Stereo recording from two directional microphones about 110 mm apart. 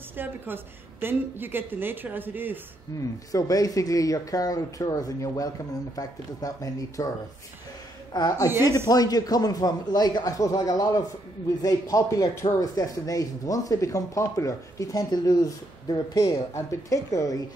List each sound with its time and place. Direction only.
0.2 s a woman's voice: 20° right (ahead or behind)
3.0 s speech: 30° left (ahead or behind)
8.1 s speech: 35° left (ahead or behind)
8.5 s a woman's voice: 20° right (ahead or behind)
8.8 s speech: 35° left (ahead or behind)